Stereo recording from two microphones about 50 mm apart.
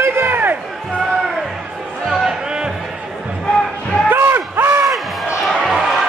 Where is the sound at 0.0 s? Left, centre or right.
Right.